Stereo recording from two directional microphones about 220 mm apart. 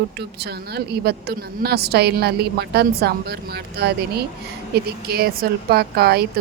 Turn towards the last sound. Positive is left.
turn(degrees=-45)  # may be behind; listen again after turning